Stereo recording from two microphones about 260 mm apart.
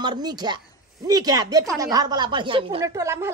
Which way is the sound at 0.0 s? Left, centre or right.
Centre.